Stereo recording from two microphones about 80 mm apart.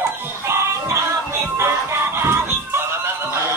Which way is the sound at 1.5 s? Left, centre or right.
Right.